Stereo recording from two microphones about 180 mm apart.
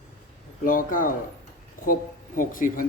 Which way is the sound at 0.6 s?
50° left (ahead or behind).